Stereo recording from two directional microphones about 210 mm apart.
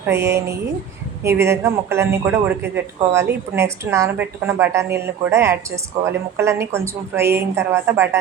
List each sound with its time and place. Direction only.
0.0 s speech: 15° right (ahead or behind)